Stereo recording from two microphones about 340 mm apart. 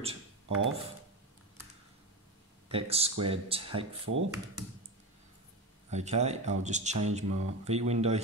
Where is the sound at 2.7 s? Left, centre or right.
Centre.